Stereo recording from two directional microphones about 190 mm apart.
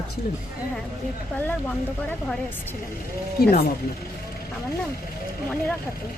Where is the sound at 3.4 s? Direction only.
55° left (ahead or behind).